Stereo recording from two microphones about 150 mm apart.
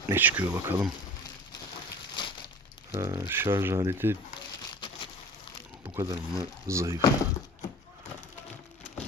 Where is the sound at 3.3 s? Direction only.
15° right (ahead or behind).